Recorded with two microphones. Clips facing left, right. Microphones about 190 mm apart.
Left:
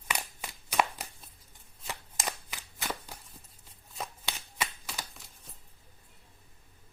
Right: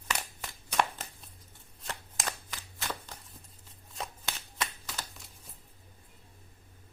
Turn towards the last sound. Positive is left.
turn(degrees=10)  # may be behind; listen again after turning